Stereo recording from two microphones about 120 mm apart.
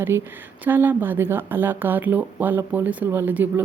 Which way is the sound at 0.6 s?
15° right (ahead or behind).